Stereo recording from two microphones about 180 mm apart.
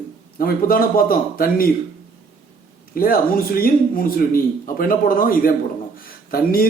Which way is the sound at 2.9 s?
55° left (ahead or behind).